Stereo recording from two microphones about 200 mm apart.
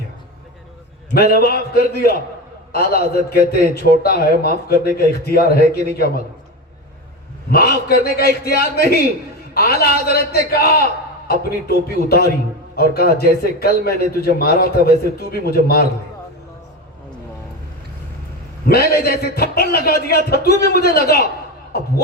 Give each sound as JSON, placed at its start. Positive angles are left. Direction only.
{"t": 1.1, "sound": "a man's voice", "side_deg": 50}
{"t": 7.5, "sound": "a man's voice", "side_deg": 50}
{"t": 18.7, "sound": "a man's voice", "side_deg": 50}